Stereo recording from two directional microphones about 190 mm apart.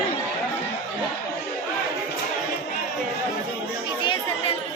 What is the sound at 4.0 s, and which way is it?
Chatter, 25° left (ahead or behind).